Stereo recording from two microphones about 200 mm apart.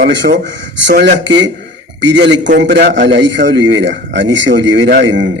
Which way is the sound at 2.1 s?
65° right (ahead or behind).